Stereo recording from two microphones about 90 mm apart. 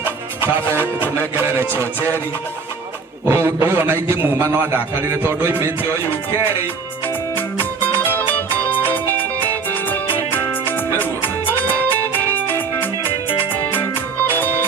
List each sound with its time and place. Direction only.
0.0 s music: 25° right (ahead or behind)
1.4 s a man's voice: 25° right (ahead or behind)
2.0 s music: 20° left (ahead or behind)
3.2 s a man's voice: 25° right (ahead or behind)
7.3 s music: 20° left (ahead or behind)
14.3 s music: 20° left (ahead or behind)